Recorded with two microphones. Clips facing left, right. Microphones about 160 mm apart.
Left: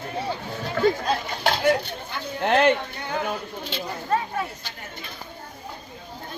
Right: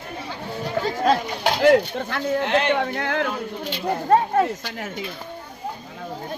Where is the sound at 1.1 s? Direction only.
90° right.